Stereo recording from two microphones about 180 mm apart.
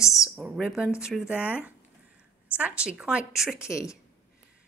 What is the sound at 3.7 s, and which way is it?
Speech, 15° left (ahead or behind).